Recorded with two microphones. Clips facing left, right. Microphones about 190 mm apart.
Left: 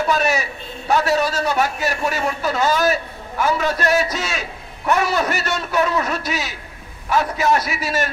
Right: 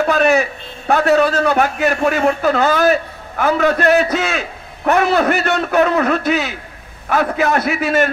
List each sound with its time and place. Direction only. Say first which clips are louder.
0.0 s a man's voice: right 6 dB; 55° right (ahead or behind)